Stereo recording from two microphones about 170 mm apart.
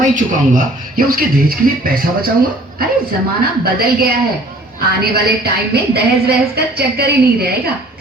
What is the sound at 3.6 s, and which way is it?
A woman's voice, 60° right (ahead or behind).